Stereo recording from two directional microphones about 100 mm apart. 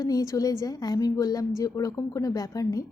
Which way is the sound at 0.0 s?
35° left (ahead or behind).